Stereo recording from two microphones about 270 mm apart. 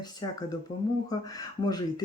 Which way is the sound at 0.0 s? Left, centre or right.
Centre.